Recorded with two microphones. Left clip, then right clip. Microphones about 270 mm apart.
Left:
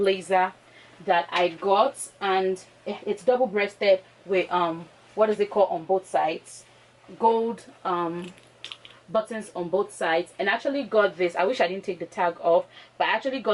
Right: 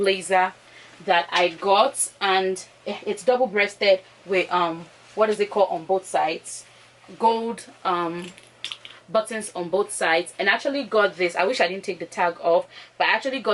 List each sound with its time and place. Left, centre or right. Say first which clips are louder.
0.1 s speech: right 2 dB; centre
5.6 s speech: right 1 dB; left; by 9.2 s centre
9.5 s speech: right 2 dB; centre
10.0 s speech: right 3 dB; centre